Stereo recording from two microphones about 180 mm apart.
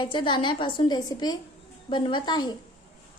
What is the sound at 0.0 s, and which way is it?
A woman's voice, 25° left (ahead or behind).